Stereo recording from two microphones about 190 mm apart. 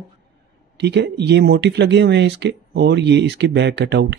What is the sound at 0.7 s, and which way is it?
Speech, 60° right (ahead or behind).